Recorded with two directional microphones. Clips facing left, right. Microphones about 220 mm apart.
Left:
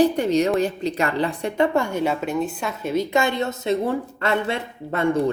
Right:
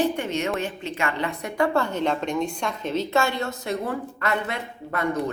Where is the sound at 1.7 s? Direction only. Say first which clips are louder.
Left 2 dB; 10° left (ahead or behind).